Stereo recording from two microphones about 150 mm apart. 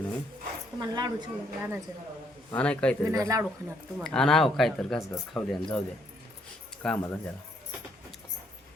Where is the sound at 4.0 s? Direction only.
5° left (ahead or behind).